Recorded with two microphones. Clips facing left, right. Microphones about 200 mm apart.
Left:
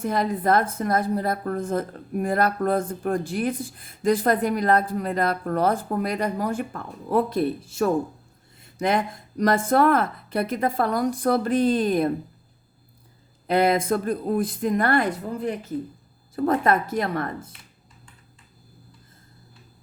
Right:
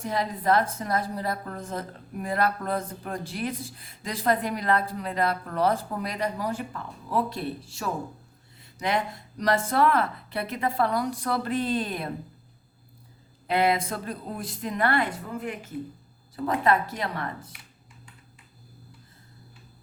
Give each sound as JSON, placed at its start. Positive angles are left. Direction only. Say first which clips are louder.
{"t": 0.0, "sound": "a woman's voice", "louder": "left 4 dB", "side_deg": 50}
{"t": 13.5, "sound": "a woman's voice", "louder": "left 4 dB", "side_deg": 45}